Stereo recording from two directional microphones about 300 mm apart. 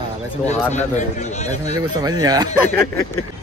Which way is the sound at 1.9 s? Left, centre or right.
Centre.